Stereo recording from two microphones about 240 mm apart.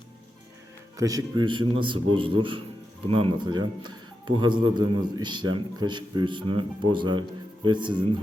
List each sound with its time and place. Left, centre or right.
0.9 s speech: centre